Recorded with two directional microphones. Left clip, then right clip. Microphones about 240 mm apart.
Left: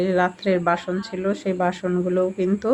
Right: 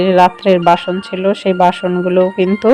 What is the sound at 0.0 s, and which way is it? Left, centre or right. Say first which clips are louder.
Speech: right 11 dB; right.